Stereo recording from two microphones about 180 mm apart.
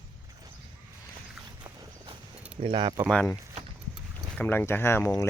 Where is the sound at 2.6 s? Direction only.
25° right (ahead or behind).